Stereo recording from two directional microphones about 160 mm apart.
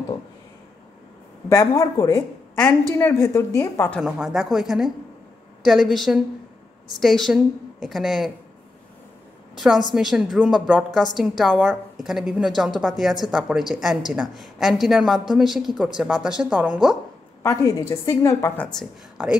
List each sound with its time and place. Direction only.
1.5 s a woman's voice: 20° left (ahead or behind)
4.0 s a woman's voice: 5° right (ahead or behind)
9.6 s a woman's voice: centre (ahead or behind)
17.4 s a woman's voice: 20° left (ahead or behind)